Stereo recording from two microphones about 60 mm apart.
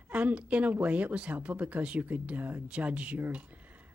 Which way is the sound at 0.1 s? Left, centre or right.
Right.